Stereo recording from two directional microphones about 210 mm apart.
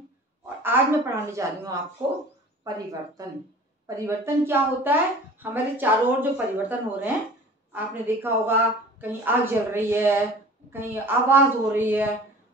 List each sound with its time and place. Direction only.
0.6 s a woman's voice: 10° right (ahead or behind)